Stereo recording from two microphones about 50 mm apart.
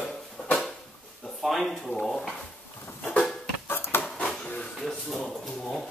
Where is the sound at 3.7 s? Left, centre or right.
Left.